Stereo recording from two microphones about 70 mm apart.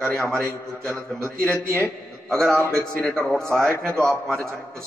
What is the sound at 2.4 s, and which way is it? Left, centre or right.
Speech, right.